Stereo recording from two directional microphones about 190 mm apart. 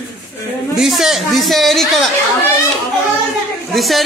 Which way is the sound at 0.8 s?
Centre (ahead or behind).